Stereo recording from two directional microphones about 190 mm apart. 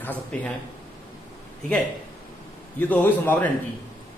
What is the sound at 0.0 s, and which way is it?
Speech, 10° left (ahead or behind).